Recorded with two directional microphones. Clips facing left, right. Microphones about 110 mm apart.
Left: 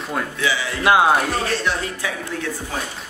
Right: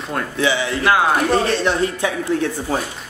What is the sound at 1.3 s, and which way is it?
Speech, 25° right (ahead or behind).